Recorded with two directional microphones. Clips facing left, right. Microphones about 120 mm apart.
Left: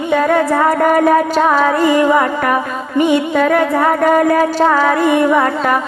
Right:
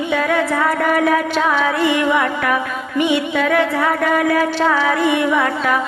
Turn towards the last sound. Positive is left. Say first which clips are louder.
# left 4 dB
turn(degrees=45)  # may be behind; listen again after turning